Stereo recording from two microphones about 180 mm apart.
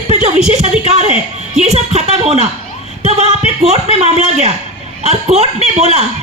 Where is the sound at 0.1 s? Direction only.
40° right (ahead or behind).